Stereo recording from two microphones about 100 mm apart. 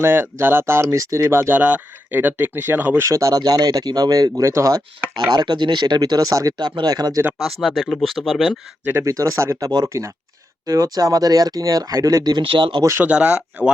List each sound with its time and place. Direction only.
0.0 s speech: 25° right (ahead or behind)
3.1 s speech: 35° right (ahead or behind)
5.3 s speech: 45° right (ahead or behind)
7.4 s speech: centre (ahead or behind)
8.8 s speech: 20° right (ahead or behind); by 12.4 s 40° right (ahead or behind)
12.4 s speech: 60° right (ahead or behind)
12.8 s speech: 30° right (ahead or behind)
13.1 s speech: 10° right (ahead or behind)